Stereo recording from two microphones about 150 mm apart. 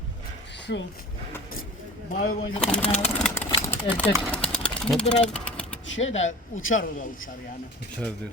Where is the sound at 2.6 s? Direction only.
5° left (ahead or behind).